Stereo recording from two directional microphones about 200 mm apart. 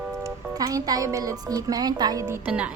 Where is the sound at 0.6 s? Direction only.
20° right (ahead or behind).